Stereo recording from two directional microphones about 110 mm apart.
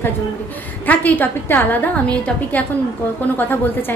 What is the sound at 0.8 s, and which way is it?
A woman's voice, 15° left (ahead or behind).